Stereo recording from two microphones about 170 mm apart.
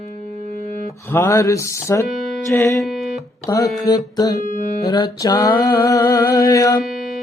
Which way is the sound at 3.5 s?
20° left (ahead or behind).